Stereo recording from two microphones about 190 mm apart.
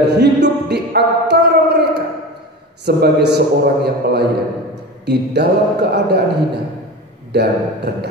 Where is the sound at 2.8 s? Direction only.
60° right (ahead or behind).